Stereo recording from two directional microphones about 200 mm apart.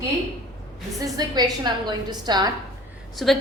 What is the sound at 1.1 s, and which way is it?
A woman's voice, 20° right (ahead or behind).